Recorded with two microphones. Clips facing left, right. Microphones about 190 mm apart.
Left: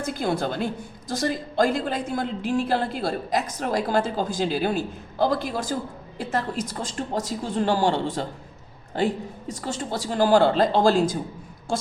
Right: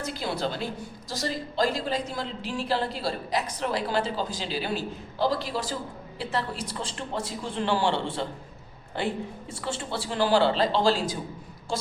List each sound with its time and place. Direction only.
0.0 s a woman's voice: 50° left (ahead or behind)
9.5 s a woman's voice: 40° left (ahead or behind)